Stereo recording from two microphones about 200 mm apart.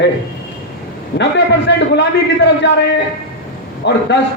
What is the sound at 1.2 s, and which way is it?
A man's voice, 60° left (ahead or behind).